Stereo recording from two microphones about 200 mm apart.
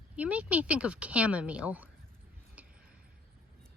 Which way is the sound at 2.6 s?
5° right (ahead or behind).